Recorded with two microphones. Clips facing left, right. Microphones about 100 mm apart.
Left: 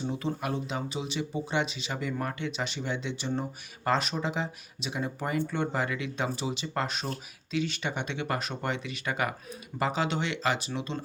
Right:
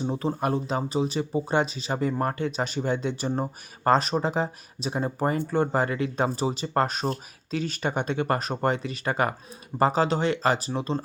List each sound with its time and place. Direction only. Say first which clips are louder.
0.1 s speech: right 7 dB; 40° right (ahead or behind)